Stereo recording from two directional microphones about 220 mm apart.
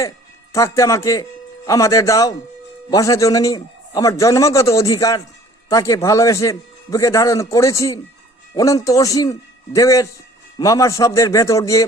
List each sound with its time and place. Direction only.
0.5 s a man's voice: 15° left (ahead or behind)